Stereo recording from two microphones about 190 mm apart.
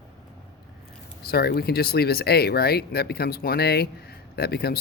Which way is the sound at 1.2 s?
55° left (ahead or behind).